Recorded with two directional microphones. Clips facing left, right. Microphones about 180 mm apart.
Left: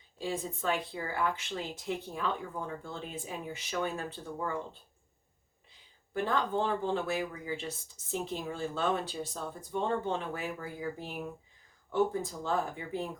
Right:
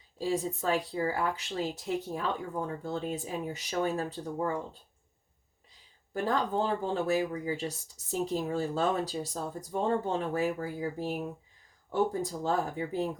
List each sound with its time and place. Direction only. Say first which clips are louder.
0.2 s speech: right 5 dB; 40° right (ahead or behind)
6.2 s speech: right 2 dB; 40° right (ahead or behind)